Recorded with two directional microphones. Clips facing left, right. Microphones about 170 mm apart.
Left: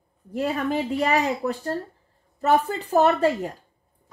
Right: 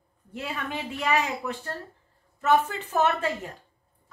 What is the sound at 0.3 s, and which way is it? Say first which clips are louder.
Speech: left 9 dB; 40° left (ahead or behind).